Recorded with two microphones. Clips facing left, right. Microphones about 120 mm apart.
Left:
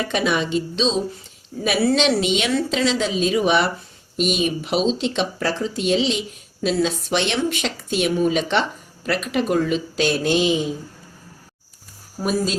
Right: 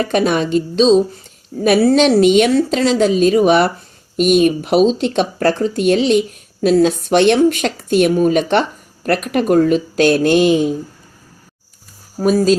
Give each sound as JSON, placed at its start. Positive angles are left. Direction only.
{"t": 0.0, "sound": "speech", "side_deg": -45}